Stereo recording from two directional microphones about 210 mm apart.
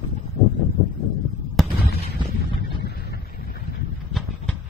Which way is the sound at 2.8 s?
50° left (ahead or behind).